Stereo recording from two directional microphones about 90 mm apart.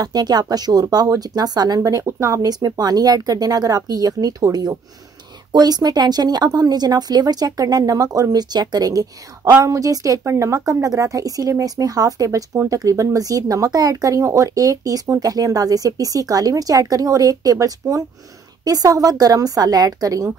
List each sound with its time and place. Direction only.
0.0 s speech: 50° right (ahead or behind)
1.9 s speech: 35° right (ahead or behind)